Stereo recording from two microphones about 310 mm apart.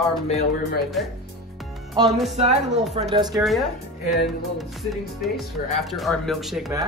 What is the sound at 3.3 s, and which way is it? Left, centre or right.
Speech, centre.